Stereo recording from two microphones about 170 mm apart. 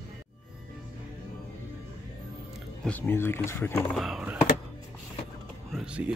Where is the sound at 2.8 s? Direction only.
10° left (ahead or behind).